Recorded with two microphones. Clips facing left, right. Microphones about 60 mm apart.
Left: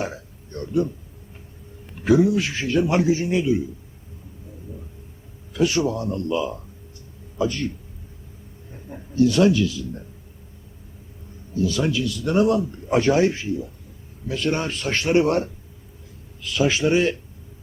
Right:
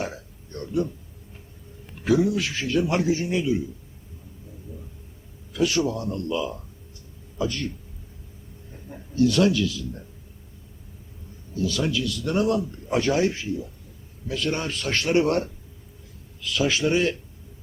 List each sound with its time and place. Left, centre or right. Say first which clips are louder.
0.0 s a sound: left 2 dB; centre
2.1 s speech: left 4 dB; centre
2.4 s a man's voice: left 3 dB; left
5.5 s a man's voice: left 2 dB; left
6.1 s speech: left 3 dB; centre
7.3 s a man's voice: left 4 dB; left
8.7 s a man's voice: left 4 dB; left
11.5 s a man's voice: left 3 dB; left